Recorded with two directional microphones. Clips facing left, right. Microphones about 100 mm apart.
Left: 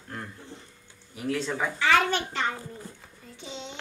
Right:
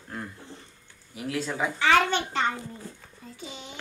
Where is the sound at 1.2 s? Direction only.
5° right (ahead or behind).